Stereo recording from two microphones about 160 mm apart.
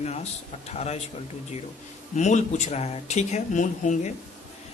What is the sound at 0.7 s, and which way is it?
Speech, 45° left (ahead or behind).